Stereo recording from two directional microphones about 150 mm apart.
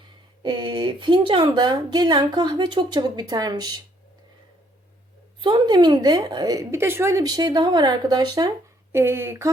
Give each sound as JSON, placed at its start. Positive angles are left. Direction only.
{"t": 0.4, "sound": "a woman's voice", "side_deg": -30}
{"t": 5.4, "sound": "a woman's voice", "side_deg": -30}